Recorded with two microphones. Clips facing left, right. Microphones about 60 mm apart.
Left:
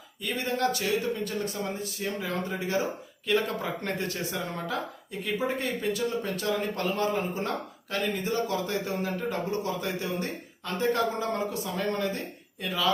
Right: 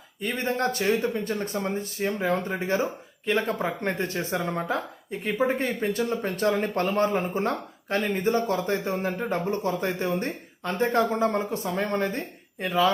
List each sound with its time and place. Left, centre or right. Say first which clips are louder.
0.2 s speech: right 2 dB; right